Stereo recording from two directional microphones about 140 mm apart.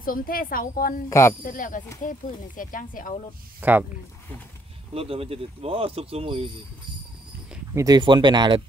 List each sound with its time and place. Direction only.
0.0 s a woman's voice: 90° left
1.4 s speech: 80° left
3.6 s speech: 10° right (ahead or behind)
4.9 s speech: 45° right (ahead or behind)
7.7 s speech: 25° right (ahead or behind)